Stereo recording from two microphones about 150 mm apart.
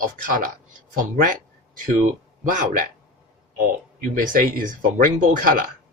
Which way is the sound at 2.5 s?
60° right (ahead or behind).